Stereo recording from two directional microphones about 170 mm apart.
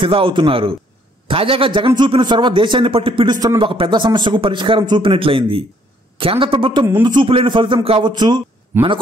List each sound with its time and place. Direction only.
0.0 s a man's voice: 30° right (ahead or behind)